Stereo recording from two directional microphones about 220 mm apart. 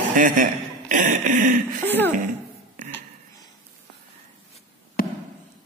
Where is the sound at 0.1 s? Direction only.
35° right (ahead or behind).